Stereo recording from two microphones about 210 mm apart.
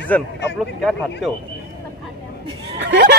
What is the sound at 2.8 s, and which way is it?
Speech, 55° right (ahead or behind).